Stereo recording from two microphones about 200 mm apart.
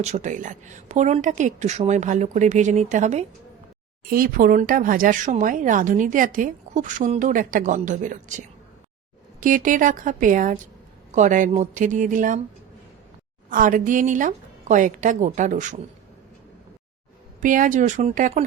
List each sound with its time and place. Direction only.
0.0 s speech: 35° right (ahead or behind)
13.5 s speech: 40° right (ahead or behind)
17.4 s speech: 40° right (ahead or behind)